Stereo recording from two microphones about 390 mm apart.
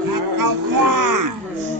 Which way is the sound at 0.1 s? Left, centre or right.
Right.